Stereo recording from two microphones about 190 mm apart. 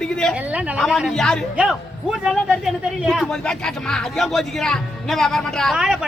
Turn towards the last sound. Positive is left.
turn(degrees=0)  # may be behind; listen again after turning